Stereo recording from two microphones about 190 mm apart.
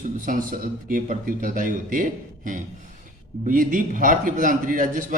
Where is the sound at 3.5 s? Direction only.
45° right (ahead or behind).